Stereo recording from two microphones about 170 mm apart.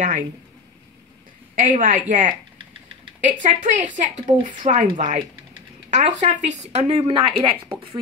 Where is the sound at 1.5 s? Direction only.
50° right (ahead or behind).